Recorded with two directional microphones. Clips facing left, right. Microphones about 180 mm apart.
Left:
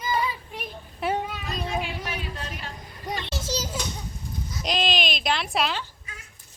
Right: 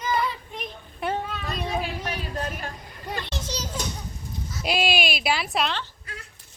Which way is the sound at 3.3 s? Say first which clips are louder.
Left 2 dB; 10° left (ahead or behind).